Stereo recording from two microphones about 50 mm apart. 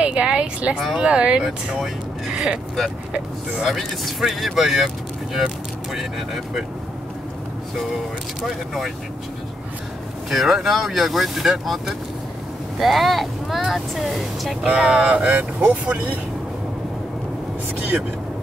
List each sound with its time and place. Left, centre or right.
0.0 s speech: right
2.3 s speech: centre
3.6 s speech: centre
8.4 s speech: centre
10.3 s speech: centre
14.9 s speech: right